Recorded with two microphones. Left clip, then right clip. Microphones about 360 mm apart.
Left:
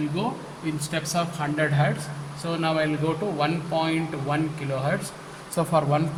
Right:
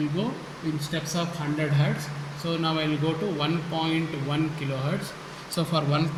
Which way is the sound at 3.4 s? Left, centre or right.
Left.